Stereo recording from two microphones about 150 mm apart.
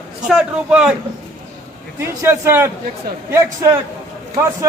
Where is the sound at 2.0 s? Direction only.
15° right (ahead or behind).